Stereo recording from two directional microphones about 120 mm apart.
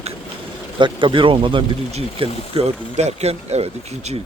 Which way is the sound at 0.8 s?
40° right (ahead or behind).